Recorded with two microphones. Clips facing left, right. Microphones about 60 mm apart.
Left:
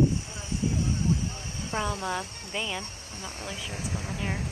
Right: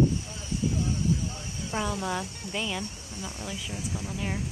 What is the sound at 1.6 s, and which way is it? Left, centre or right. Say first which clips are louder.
Speech: even; left.